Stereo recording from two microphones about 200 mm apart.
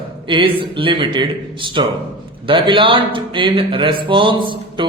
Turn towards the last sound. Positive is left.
turn(degrees=-25)  # may be behind; listen again after turning